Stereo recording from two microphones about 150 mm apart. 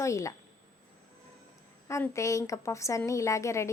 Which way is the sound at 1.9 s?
20° left (ahead or behind).